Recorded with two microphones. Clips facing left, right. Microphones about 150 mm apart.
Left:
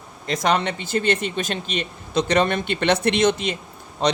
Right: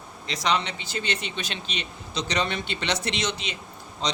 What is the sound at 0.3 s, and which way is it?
Speech, 50° left (ahead or behind).